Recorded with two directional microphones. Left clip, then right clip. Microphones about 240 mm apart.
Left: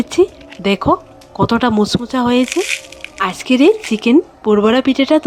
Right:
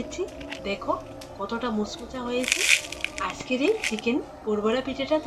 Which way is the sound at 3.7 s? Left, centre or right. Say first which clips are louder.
Left 9 dB; centre.